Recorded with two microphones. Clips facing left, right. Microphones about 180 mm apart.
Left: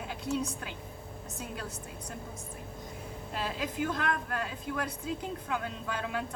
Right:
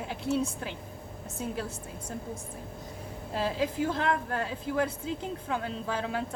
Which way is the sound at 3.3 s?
25° right (ahead or behind).